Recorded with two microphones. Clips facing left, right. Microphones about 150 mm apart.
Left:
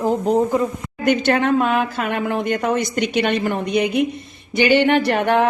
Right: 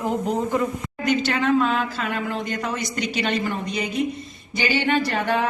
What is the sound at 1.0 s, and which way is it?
Speech, 55° left (ahead or behind).